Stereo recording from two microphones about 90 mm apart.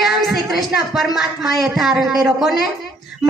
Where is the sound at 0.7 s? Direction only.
5° right (ahead or behind).